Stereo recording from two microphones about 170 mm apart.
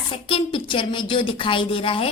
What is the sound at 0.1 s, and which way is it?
A woman's voice, 30° left (ahead or behind).